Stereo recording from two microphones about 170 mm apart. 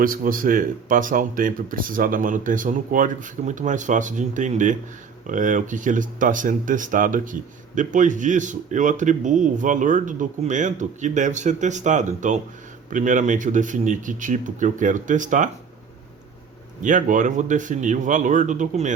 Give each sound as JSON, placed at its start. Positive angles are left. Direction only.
{"t": 0.0, "sound": "speech", "side_deg": -55}
{"t": 16.8, "sound": "speech", "side_deg": -50}